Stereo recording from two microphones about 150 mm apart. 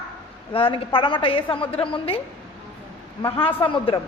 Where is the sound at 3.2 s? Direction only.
35° left (ahead or behind).